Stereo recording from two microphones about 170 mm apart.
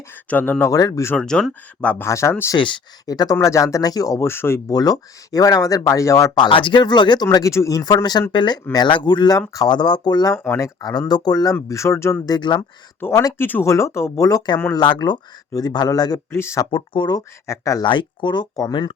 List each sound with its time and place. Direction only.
0.3 s speech: 10° left (ahead or behind)
1.1 s speech: 5° left (ahead or behind)
2.6 s speech: 30° left (ahead or behind)
10.3 s speech: 10° left (ahead or behind)
10.8 s speech: 20° left (ahead or behind)
16.7 s speech: 30° left (ahead or behind)